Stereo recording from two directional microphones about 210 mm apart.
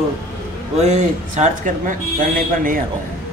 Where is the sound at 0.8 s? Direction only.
35° right (ahead or behind).